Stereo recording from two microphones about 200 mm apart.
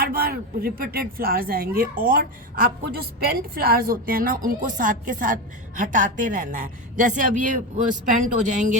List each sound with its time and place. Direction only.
0.0 s a woman's voice: 50° right (ahead or behind)